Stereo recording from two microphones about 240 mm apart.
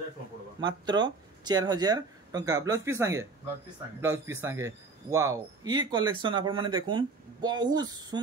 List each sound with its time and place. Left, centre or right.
0.6 s a man's voice: centre